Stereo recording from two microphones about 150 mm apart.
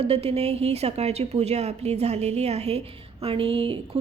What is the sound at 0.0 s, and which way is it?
A woman's voice, 40° right (ahead or behind).